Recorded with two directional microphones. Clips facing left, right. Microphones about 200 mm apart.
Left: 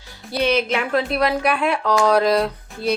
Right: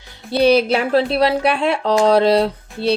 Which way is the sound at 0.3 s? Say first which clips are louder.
Right 6 dB; 35° right (ahead or behind).